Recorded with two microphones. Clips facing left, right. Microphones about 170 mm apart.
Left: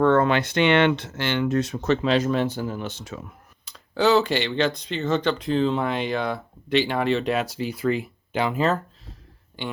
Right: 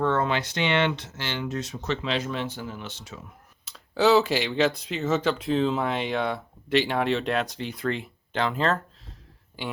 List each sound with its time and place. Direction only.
0.0 s speech: 60° left (ahead or behind)
3.7 s speech: centre (ahead or behind)
9.6 s speech: 5° right (ahead or behind)